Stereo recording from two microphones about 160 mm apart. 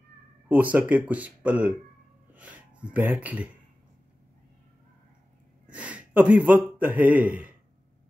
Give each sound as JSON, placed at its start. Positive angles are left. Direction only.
{"t": 0.5, "sound": "speech", "side_deg": -10}
{"t": 5.7, "sound": "a man's voice", "side_deg": -10}